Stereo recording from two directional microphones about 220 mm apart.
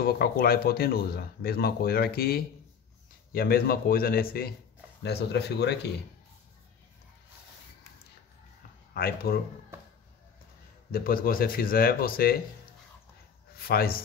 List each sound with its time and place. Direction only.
0.0 s speech: 45° left (ahead or behind)
8.9 s speech: 45° left (ahead or behind)
10.9 s speech: 40° left (ahead or behind)
13.6 s speech: 45° left (ahead or behind)